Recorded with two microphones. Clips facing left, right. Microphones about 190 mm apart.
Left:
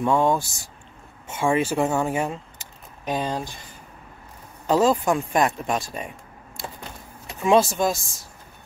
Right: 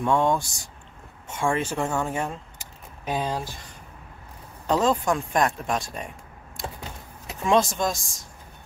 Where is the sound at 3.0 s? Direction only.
5° right (ahead or behind).